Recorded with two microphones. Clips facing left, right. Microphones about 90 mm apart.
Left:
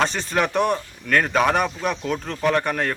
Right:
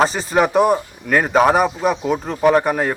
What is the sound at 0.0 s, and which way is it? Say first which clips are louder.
A man's voice: right 6 dB; 5° right (ahead or behind).